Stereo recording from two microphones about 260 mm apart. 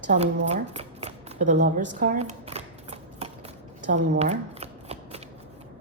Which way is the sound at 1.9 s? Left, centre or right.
Right.